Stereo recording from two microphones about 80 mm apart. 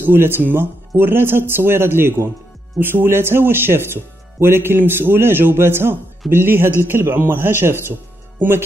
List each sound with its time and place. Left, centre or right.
0.0 s speech: right